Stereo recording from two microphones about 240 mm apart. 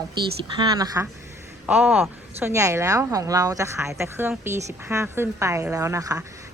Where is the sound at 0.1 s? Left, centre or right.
Centre.